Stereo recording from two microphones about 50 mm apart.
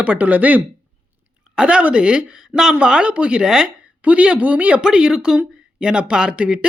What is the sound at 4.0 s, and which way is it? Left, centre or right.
Speech, right.